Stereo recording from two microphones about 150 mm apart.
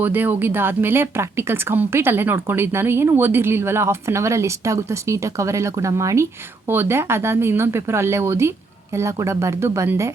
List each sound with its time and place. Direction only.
0.0 s a woman's voice: 15° right (ahead or behind)